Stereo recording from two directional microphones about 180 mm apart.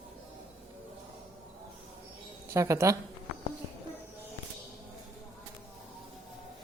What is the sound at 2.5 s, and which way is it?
Speech, 15° right (ahead or behind).